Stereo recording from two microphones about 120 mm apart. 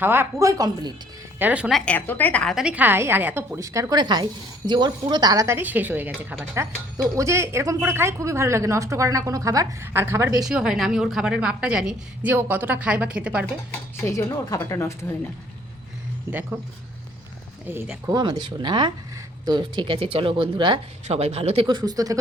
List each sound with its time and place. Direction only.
0.0 s speech: 20° right (ahead or behind); by 0.9 s 35° right (ahead or behind)
1.4 s a woman's voice: 10° right (ahead or behind)
1.7 s a woman's voice: 10° left (ahead or behind)
2.6 s speech: 10° right (ahead or behind)
10.4 s a woman's voice: 5° right (ahead or behind)
13.9 s a woman's voice: 25° left (ahead or behind)
16.3 s a woman's voice: 15° right (ahead or behind)
18.0 s speech: 35° right (ahead or behind)
21.1 s speech: 60° right (ahead or behind)
21.7 s speech: 35° right (ahead or behind)